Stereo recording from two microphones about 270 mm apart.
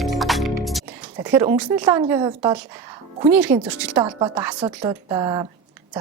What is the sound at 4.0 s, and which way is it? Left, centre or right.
Speech, centre.